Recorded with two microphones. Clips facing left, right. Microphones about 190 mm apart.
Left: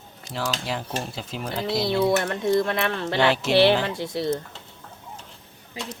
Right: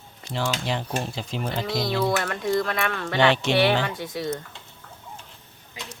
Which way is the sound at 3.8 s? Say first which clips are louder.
Left 3 dB; 25° left (ahead or behind).